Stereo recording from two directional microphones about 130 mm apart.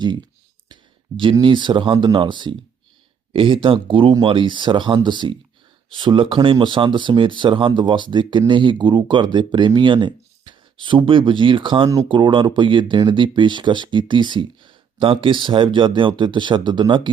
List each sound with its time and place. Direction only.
0.7 s speech: 40° right (ahead or behind)